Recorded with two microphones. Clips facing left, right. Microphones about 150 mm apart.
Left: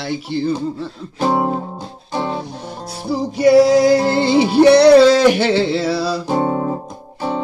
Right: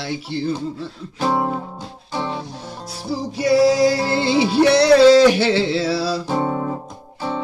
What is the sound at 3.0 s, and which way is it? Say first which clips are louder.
Music: left 7 dB; 60° left (ahead or behind).